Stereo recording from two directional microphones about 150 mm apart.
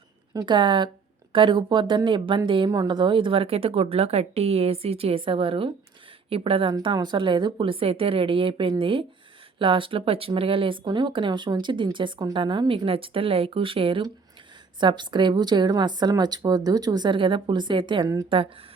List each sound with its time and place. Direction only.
0.3 s a woman's voice: 30° right (ahead or behind)